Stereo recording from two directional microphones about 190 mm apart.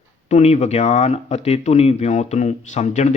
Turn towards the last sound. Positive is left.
turn(degrees=35)  # may be behind; listen again after turning